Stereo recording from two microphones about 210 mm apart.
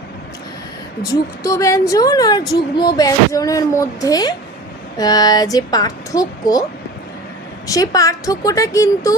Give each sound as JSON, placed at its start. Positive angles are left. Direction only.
{"t": 1.1, "sound": "speech", "side_deg": 15}
{"t": 7.7, "sound": "speech", "side_deg": 15}